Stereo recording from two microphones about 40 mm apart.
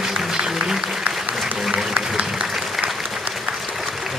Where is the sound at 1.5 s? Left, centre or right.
Centre.